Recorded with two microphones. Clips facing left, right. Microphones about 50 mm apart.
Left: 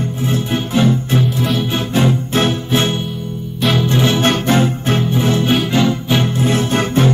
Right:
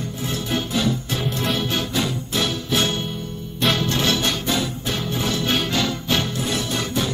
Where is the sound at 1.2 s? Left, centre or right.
Centre.